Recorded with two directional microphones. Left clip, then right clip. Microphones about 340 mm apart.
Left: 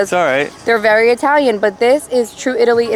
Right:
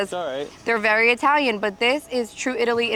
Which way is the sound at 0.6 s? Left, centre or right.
Centre.